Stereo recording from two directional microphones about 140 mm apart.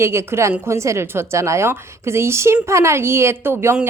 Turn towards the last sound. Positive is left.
turn(degrees=-15)  # may be behind; listen again after turning